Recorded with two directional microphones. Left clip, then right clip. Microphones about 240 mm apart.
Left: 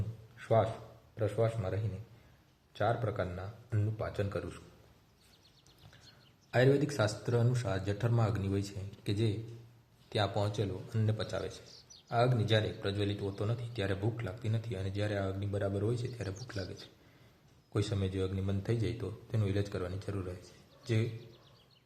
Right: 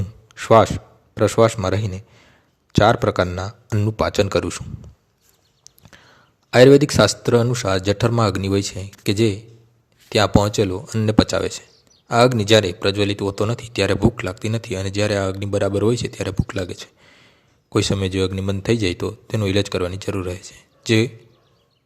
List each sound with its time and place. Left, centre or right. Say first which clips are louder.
0.3 s a sound: right 17 dB; right
1.1 s a man's voice: right 17 dB; right
6.5 s speech: right 18 dB; right